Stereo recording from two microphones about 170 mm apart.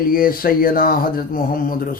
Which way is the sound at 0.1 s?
55° left (ahead or behind).